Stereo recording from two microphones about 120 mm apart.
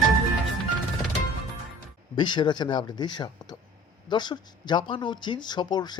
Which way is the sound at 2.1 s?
40° left (ahead or behind).